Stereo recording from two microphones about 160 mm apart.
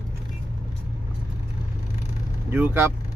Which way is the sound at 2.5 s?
15° right (ahead or behind).